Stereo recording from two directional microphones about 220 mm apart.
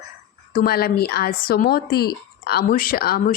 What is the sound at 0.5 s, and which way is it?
A woman's voice, 45° left (ahead or behind).